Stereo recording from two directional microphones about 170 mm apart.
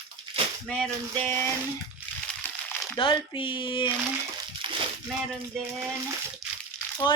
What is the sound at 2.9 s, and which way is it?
Speech, 30° left (ahead or behind).